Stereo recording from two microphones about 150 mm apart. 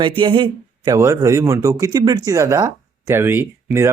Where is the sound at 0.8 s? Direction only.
20° right (ahead or behind).